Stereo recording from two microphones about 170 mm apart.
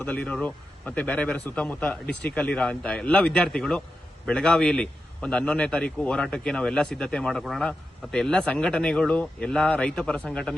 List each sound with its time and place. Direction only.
0.0 s a man's voice: 5° left (ahead or behind)